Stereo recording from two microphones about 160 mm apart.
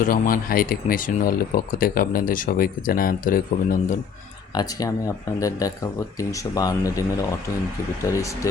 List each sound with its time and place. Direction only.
0.0 s speech: 60° left (ahead or behind)
4.5 s speech: 25° left (ahead or behind)